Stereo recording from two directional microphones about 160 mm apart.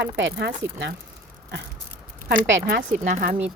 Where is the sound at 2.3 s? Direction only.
70° right (ahead or behind).